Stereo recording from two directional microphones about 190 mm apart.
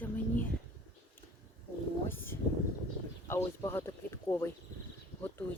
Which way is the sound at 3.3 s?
10° left (ahead or behind).